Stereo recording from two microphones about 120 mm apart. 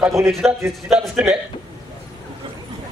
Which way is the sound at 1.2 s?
10° right (ahead or behind).